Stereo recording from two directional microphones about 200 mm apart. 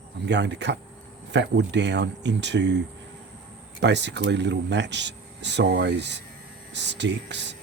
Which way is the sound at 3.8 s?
60° right (ahead or behind).